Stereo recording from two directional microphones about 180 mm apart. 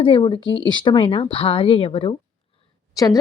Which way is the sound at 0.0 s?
25° left (ahead or behind).